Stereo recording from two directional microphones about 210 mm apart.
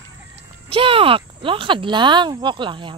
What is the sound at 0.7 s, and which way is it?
Speech, 25° right (ahead or behind).